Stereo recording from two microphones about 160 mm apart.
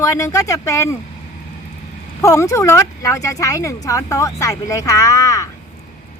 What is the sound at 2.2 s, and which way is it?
Speech, 20° left (ahead or behind).